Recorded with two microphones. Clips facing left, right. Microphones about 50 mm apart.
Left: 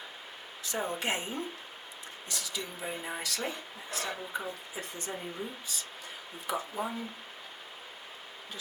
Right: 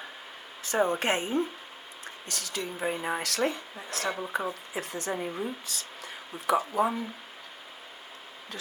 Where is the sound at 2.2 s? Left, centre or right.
Right.